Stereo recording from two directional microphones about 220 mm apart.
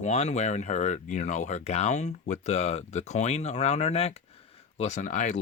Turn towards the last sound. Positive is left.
turn(degrees=35)  # may be behind; listen again after turning